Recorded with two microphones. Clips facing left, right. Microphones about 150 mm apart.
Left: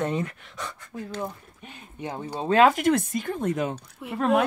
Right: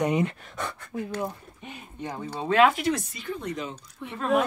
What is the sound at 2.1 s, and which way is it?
Speech, 30° left (ahead or behind).